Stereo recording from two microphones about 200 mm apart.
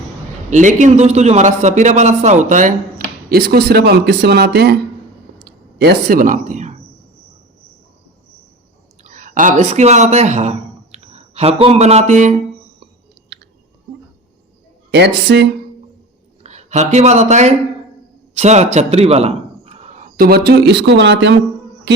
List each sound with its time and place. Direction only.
0.5 s a man's voice: 40° right (ahead or behind)
9.0 s speech: 40° right (ahead or behind)
14.8 s speech: 55° right (ahead or behind)
16.4 s a man's voice: 35° right (ahead or behind); by 21.3 s 60° right (ahead or behind)